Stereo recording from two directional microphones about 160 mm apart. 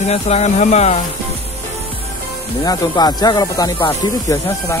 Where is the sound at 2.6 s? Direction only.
25° left (ahead or behind).